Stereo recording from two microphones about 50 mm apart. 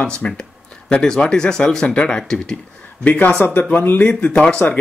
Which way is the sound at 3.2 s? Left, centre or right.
Left.